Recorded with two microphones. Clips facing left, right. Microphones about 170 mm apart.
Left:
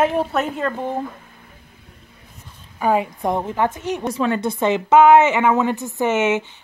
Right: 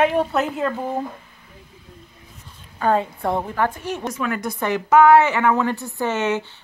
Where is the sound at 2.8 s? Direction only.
10° left (ahead or behind).